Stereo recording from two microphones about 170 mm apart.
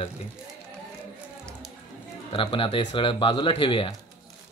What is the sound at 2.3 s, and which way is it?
Speech, 30° left (ahead or behind).